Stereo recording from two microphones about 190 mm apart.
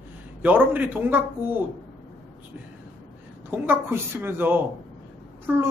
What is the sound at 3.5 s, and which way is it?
A woman's voice, 10° right (ahead or behind).